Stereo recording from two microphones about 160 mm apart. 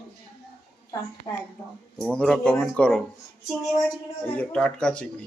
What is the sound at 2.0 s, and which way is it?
Speech, 5° left (ahead or behind).